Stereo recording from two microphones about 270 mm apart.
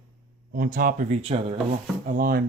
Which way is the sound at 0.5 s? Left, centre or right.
Right.